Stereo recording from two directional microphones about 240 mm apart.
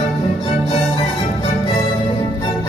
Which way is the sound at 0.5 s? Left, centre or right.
Left.